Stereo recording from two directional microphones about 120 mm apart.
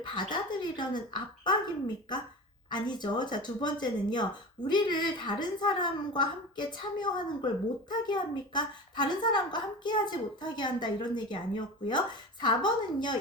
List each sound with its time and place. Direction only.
0.0 s speech: 40° left (ahead or behind)
2.6 s speech: 40° left (ahead or behind)